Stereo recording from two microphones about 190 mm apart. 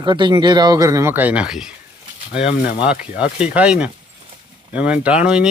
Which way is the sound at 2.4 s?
30° left (ahead or behind).